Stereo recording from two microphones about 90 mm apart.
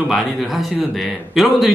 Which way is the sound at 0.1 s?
Centre (ahead or behind).